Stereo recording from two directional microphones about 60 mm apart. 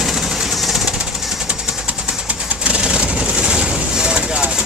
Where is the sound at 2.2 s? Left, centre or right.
Centre.